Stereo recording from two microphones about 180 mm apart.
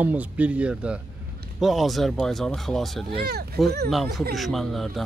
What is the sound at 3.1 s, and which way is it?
Speech, 60° right (ahead or behind).